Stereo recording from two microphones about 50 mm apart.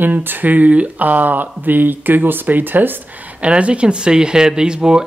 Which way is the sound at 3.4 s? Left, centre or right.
Right.